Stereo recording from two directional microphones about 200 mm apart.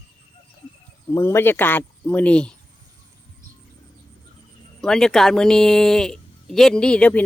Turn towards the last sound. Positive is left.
turn(degrees=5)  # may be behind; listen again after turning